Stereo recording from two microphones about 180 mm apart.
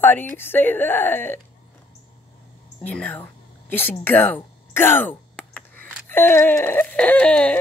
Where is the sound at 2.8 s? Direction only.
5° left (ahead or behind).